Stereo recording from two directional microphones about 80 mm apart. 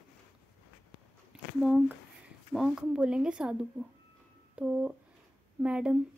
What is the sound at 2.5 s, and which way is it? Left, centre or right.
Speech, centre.